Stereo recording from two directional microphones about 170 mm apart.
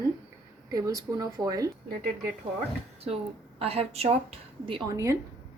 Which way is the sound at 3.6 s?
35° right (ahead or behind).